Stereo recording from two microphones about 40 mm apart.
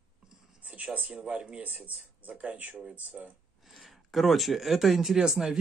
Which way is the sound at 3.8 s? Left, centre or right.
Centre.